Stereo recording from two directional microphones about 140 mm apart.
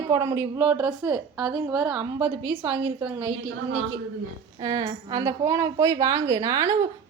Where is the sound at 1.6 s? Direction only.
10° right (ahead or behind).